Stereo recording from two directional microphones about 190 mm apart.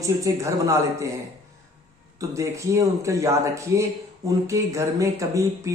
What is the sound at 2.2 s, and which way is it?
Speech, 15° right (ahead or behind).